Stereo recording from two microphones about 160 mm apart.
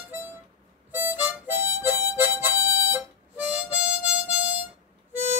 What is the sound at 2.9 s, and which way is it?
Harmonica, 10° right (ahead or behind).